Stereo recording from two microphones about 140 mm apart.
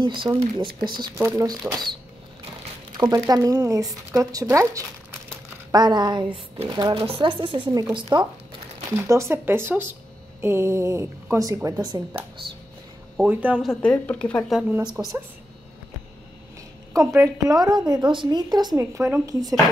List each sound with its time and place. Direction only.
0.0 s speech: 35° right (ahead or behind)
1.1 s speech: 25° right (ahead or behind)
3.0 s speech: 25° right (ahead or behind)
8.9 s speech: 20° right (ahead or behind)
13.3 s speech: 10° right (ahead or behind)
13.8 s speech: 10° left (ahead or behind)
15.0 s speech: 20° right (ahead or behind)
16.9 s speech: 20° right (ahead or behind)
18.8 s speech: 15° right (ahead or behind)